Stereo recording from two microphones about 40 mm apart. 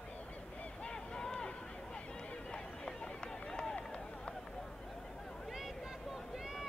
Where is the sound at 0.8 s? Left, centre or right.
Centre.